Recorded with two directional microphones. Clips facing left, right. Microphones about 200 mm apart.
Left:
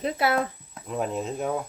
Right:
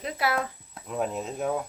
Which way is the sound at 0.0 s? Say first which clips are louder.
Left 4 dB; 25° left (ahead or behind).